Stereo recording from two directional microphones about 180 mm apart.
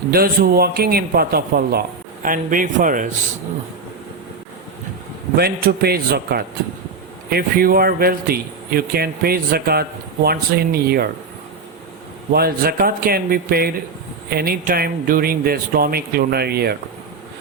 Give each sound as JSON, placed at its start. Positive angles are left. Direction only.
{"t": 0.1, "sound": "a man's voice", "side_deg": -55}
{"t": 5.4, "sound": "speech", "side_deg": -60}
{"t": 12.3, "sound": "speech", "side_deg": -55}